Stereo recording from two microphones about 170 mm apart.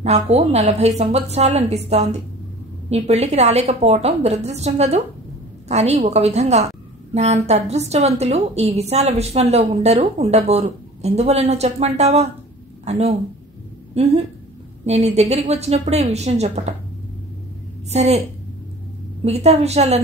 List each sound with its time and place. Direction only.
0.0 s a woman's voice: 40° right (ahead or behind)
17.9 s a woman's voice: 40° right (ahead or behind)
19.2 s a woman's voice: 40° right (ahead or behind)